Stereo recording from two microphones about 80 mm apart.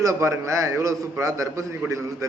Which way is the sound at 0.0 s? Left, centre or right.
Right.